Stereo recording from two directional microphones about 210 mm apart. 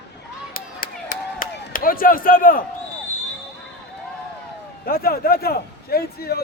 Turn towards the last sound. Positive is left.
turn(degrees=45)  # may be behind; listen again after turning